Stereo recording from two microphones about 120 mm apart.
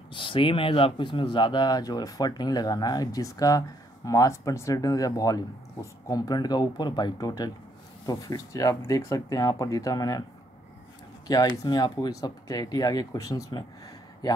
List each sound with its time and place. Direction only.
0.1 s speech: 45° left (ahead or behind)
11.2 s speech: 30° left (ahead or behind)